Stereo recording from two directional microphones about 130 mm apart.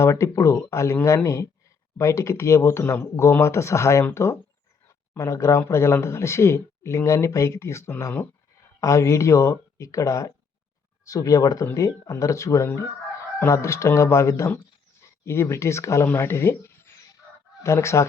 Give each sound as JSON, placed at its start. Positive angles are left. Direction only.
{"t": 0.0, "sound": "speech", "side_deg": 25}